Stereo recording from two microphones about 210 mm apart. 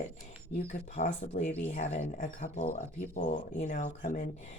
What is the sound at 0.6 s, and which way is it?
Speech, 35° left (ahead or behind).